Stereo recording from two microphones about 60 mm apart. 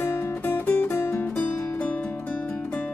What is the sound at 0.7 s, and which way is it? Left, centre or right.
Music, left.